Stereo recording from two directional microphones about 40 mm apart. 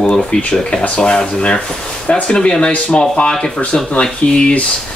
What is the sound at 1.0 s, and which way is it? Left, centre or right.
Speech, left.